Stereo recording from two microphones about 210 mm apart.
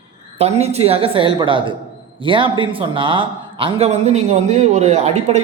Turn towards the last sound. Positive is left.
turn(degrees=-30)  # may be behind; listen again after turning